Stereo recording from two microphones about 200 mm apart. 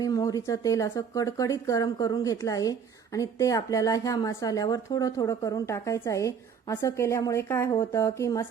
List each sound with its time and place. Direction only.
0.0 s speech: 20° left (ahead or behind)